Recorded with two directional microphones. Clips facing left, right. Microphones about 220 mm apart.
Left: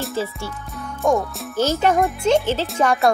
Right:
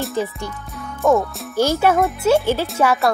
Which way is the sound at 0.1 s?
15° right (ahead or behind).